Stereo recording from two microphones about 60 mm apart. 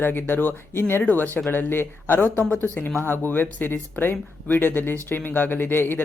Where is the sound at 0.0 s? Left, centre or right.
Left.